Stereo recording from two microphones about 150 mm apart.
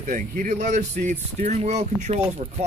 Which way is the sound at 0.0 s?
60° right (ahead or behind).